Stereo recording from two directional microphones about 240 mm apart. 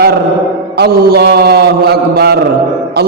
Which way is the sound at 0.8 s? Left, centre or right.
Right.